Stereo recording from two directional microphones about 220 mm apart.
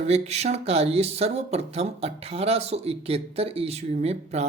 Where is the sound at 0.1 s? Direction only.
30° right (ahead or behind).